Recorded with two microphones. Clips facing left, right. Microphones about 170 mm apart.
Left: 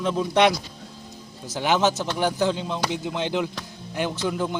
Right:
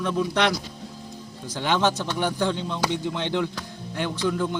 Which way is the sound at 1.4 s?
10° left (ahead or behind).